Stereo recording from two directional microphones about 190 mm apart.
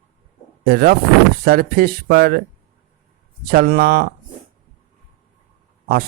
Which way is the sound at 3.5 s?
50° right (ahead or behind).